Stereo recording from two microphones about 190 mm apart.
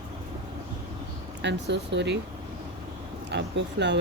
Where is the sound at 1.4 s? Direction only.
65° right (ahead or behind).